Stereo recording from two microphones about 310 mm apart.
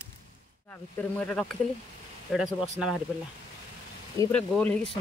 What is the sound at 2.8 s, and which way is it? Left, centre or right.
Speech, centre.